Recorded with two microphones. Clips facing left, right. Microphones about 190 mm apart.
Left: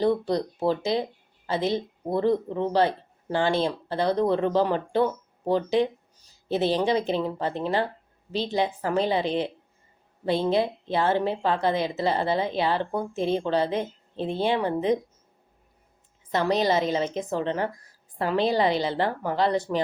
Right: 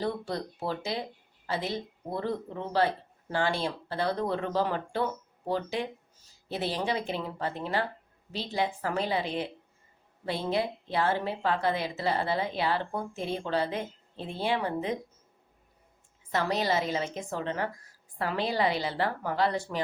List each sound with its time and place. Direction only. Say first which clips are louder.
0.0 s a woman's voice: left 9 dB; 20° left (ahead or behind)
16.3 s a woman's voice: left 5 dB; 20° left (ahead or behind)